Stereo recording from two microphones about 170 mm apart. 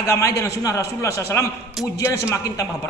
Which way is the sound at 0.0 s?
20° left (ahead or behind).